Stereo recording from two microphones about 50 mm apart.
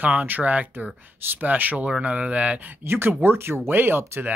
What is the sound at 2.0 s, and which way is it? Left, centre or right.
Speech, right.